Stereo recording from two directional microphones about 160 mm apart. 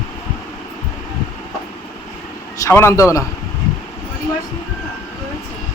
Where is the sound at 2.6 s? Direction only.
15° left (ahead or behind).